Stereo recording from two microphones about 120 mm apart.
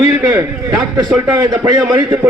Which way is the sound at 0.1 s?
20° right (ahead or behind).